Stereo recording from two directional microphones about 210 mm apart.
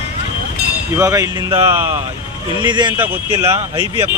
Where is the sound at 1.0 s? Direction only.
15° right (ahead or behind).